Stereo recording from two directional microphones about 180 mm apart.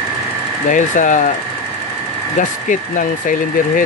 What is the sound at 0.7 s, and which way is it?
Speech, 45° left (ahead or behind).